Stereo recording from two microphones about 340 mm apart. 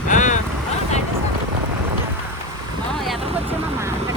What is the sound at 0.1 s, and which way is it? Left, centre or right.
Vehicle, left.